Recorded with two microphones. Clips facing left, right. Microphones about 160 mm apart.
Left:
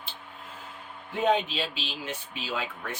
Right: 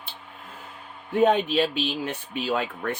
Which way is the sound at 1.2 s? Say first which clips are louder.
Right 5 dB; 55° right (ahead or behind).